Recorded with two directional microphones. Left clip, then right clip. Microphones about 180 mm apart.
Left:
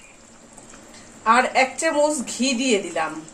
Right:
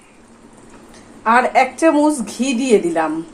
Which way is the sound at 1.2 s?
40° right (ahead or behind).